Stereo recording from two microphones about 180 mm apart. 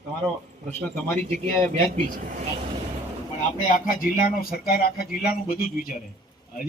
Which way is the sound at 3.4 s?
50° left (ahead or behind).